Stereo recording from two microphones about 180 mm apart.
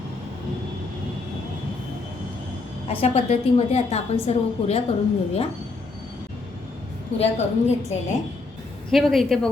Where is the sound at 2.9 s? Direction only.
35° left (ahead or behind).